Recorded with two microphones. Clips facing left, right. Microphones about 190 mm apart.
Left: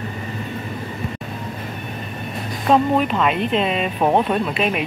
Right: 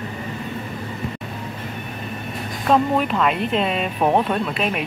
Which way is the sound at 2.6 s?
Centre (ahead or behind).